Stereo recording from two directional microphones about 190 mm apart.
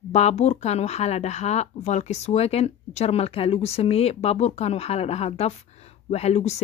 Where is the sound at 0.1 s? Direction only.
35° left (ahead or behind).